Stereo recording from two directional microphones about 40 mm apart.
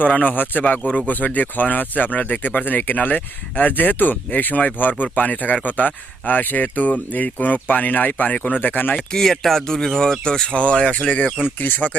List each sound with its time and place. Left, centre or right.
0.1 s speech: left
8.6 s speech: left
9.1 s speech: centre
10.9 s speech: left
11.6 s speech: left